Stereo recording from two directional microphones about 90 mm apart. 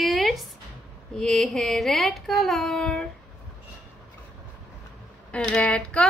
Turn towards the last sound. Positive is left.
turn(degrees=10)  # may be behind; listen again after turning